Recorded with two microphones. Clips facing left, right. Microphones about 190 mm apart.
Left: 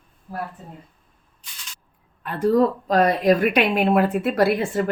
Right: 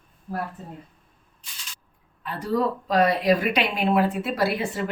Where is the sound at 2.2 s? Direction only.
55° left (ahead or behind).